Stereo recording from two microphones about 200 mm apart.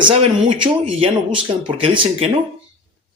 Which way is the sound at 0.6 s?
25° right (ahead or behind).